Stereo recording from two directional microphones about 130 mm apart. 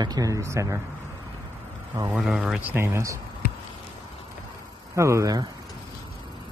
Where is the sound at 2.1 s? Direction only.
5° right (ahead or behind); by 3.2 s 20° right (ahead or behind).